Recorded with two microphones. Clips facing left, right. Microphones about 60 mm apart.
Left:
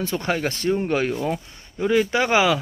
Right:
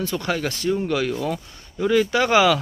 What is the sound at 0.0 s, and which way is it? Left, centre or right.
Speech, left.